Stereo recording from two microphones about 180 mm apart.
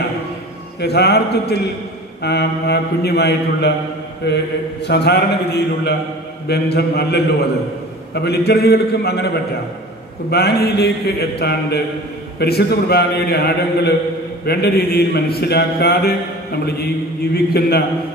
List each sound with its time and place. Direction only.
0.7 s a man's voice: 65° left (ahead or behind)
17.6 s a man's voice: 60° left (ahead or behind)